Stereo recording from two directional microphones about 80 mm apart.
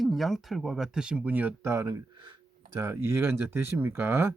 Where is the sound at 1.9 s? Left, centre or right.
Right.